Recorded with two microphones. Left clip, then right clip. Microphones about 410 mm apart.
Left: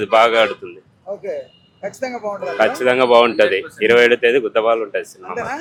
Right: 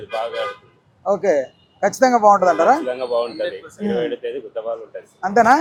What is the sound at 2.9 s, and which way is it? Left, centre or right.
Speech, left.